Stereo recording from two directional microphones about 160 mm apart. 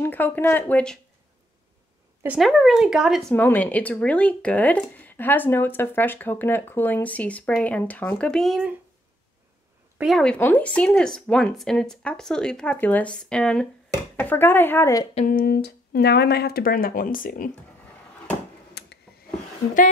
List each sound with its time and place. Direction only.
0.0 s speech: 10° left (ahead or behind)
2.2 s speech: centre (ahead or behind)
10.0 s speech: 5° left (ahead or behind)
15.2 s speech: 65° left (ahead or behind)
18.8 s a sound: 90° left